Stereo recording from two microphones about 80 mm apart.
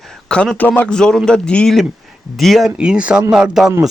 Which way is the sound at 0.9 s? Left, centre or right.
Centre.